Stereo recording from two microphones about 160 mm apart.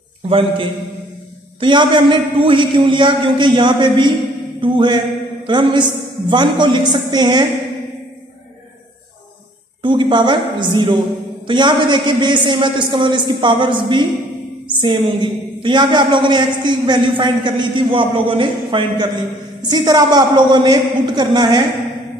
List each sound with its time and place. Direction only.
0.3 s a woman's voice: 35° right (ahead or behind)
4.6 s music: 30° right (ahead or behind)
5.5 s a man's voice: 30° right (ahead or behind)
9.8 s a woman's voice: 30° right (ahead or behind)